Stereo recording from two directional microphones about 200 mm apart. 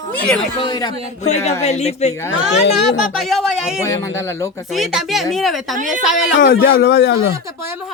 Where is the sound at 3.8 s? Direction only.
15° left (ahead or behind).